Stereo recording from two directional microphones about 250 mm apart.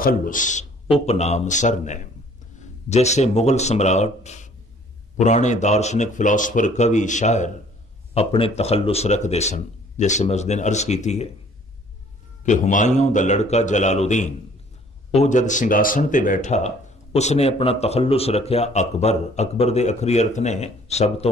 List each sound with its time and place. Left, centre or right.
0.0 s speech: left
12.4 s speech: left